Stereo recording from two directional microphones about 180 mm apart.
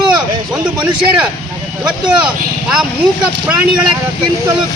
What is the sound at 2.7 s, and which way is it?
Speech, 5° right (ahead or behind).